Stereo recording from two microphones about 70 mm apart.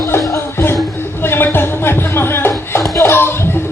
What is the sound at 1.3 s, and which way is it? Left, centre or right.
Music, left.